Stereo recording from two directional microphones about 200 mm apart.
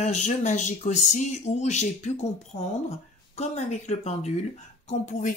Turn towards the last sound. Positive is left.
turn(degrees=40)  # may be behind; listen again after turning